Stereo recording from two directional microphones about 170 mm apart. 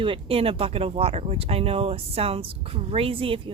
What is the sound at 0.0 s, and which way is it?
Speech, 30° right (ahead or behind).